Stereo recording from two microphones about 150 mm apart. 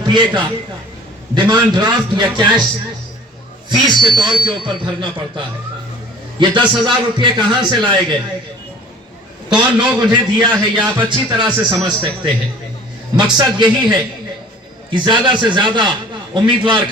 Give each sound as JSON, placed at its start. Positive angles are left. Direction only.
{"t": 0.0, "sound": "a man's voice", "side_deg": -30}
{"t": 3.7, "sound": "a man's voice", "side_deg": -30}
{"t": 9.5, "sound": "a man's voice", "side_deg": -30}